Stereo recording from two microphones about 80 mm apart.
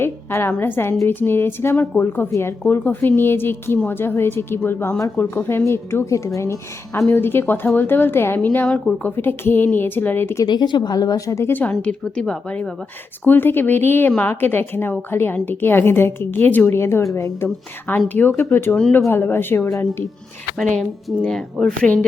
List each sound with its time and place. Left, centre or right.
0.0 s a woman's voice: left
8.4 s a woman's voice: centre
9.1 s a woman's voice: left
10.4 s speech: left
11.3 s a woman's voice: left
11.7 s a woman's voice: centre
13.2 s a woman's voice: left
18.1 s a woman's voice: left
20.6 s a woman's voice: centre